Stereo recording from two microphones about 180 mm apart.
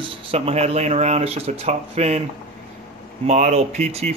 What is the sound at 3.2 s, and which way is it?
Speech, 40° right (ahead or behind).